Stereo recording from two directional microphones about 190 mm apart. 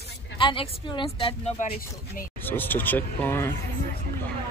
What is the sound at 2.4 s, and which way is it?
Speech, 10° left (ahead or behind).